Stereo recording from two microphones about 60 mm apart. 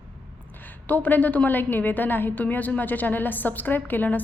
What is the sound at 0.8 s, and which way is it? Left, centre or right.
A woman's voice, left.